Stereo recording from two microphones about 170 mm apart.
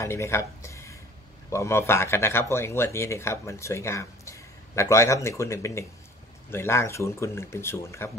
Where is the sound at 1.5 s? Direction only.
15° left (ahead or behind).